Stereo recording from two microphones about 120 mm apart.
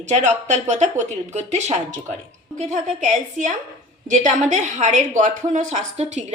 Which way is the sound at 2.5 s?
90° right.